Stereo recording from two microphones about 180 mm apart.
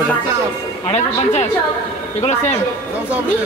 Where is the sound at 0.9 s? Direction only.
40° left (ahead or behind).